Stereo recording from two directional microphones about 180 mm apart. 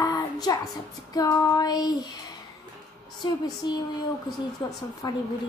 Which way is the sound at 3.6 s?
25° left (ahead or behind).